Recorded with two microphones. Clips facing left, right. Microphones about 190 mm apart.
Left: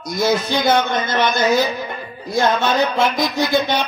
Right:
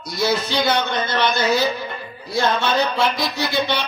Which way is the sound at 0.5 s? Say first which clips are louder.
Left 3 dB; 50° left (ahead or behind).